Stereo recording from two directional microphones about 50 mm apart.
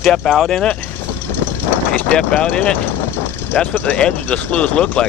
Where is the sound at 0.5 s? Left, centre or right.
Centre.